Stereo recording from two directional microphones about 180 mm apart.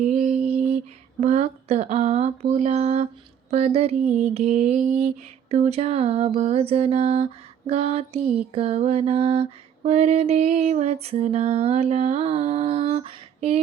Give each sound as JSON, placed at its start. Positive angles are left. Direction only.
{"t": 0.0, "sound": "lullaby", "side_deg": -40}
{"t": 1.2, "sound": "a sound", "side_deg": -35}
{"t": 3.5, "sound": "music", "side_deg": -35}
{"t": 4.0, "sound": "female singing", "side_deg": -10}
{"t": 4.4, "sound": "music", "side_deg": -40}
{"t": 4.8, "sound": "a sound", "side_deg": -5}
{"t": 5.5, "sound": "music", "side_deg": -35}